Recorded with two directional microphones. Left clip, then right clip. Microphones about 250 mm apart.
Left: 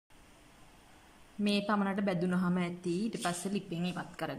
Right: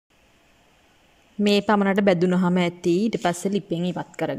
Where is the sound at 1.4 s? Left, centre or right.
Right.